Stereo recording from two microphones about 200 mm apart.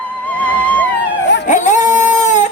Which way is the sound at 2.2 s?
35° left (ahead or behind).